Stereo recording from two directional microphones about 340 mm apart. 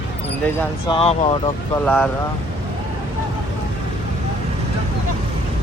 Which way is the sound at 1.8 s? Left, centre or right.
Centre.